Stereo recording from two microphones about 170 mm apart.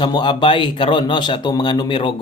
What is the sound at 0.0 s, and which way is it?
A man's voice, 25° left (ahead or behind).